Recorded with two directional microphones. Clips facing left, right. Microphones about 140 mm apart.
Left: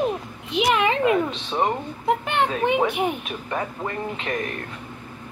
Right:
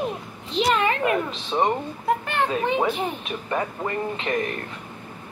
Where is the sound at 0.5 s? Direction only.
10° left (ahead or behind).